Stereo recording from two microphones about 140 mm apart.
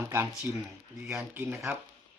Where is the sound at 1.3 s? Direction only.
15° right (ahead or behind).